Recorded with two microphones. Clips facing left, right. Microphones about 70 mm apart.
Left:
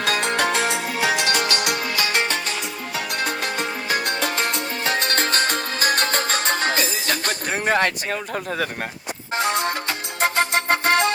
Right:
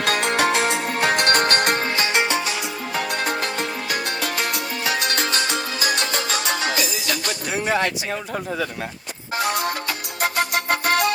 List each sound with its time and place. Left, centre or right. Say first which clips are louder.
0.0 s music: right 1 dB; right
2.0 s music: right 2 dB; right
2.9 s music: right 2 dB; centre
3.8 s music: left 2 dB; left
9.4 s music: left 1 dB; left